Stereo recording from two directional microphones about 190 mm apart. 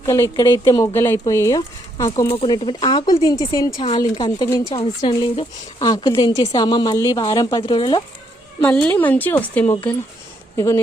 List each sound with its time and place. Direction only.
0.0 s speech: 15° left (ahead or behind)
2.3 s speech: 30° left (ahead or behind)
8.6 s speech: 5° left (ahead or behind)